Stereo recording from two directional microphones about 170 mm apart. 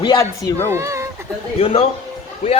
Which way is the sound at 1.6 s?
35° left (ahead or behind).